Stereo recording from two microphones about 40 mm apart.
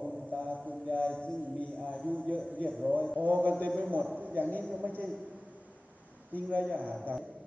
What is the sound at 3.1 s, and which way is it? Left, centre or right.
Speech, right.